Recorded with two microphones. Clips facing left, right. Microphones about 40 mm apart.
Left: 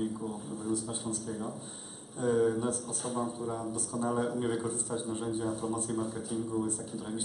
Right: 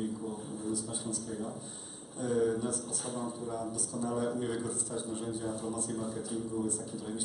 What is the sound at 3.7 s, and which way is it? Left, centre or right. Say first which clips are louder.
Speech: left 3 dB; left.